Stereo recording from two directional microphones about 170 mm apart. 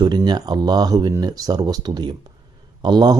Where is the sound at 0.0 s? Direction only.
25° right (ahead or behind).